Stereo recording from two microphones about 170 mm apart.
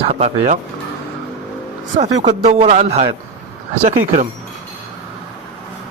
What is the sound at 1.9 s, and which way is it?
A man's voice, 45° right (ahead or behind).